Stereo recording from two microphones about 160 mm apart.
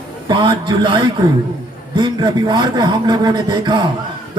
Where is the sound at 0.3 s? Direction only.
30° right (ahead or behind).